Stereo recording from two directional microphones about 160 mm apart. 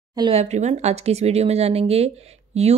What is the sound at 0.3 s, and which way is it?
Speech, 45° right (ahead or behind).